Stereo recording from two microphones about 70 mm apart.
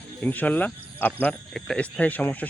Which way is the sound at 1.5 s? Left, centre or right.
Centre.